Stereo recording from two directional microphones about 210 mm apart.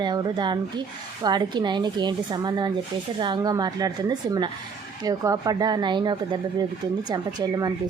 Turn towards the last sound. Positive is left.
turn(degrees=-20)  # may be behind; listen again after turning